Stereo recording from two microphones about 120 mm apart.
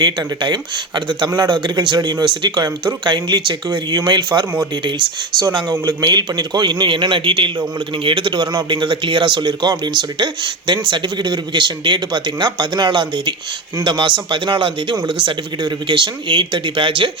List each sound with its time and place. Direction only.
0.0 s speech: 40° right (ahead or behind)
6.0 s a man's voice: 35° right (ahead or behind)